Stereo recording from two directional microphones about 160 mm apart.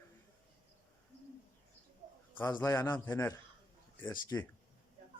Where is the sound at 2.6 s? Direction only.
15° left (ahead or behind).